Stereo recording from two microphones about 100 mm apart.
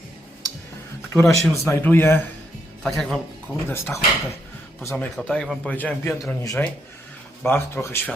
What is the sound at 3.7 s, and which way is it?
Speech, 25° left (ahead or behind).